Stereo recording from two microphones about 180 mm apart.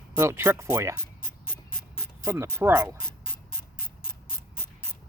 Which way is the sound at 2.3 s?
15° right (ahead or behind).